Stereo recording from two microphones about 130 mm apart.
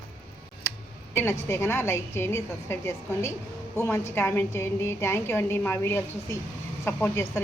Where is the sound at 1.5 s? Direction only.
20° left (ahead or behind).